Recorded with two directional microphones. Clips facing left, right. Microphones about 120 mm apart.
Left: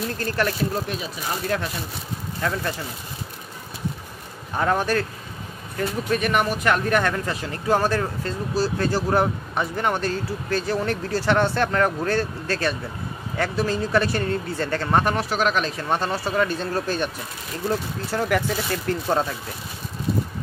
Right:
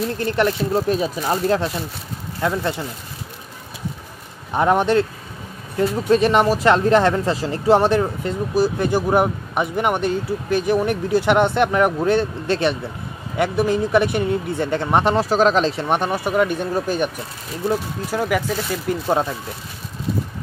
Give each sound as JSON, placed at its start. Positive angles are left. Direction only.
{"t": 0.2, "sound": "speech", "side_deg": -20}
{"t": 0.8, "sound": "speech", "side_deg": -45}
{"t": 2.4, "sound": "speech", "side_deg": -20}
{"t": 4.5, "sound": "speech", "side_deg": -20}
{"t": 15.1, "sound": "speech", "side_deg": -35}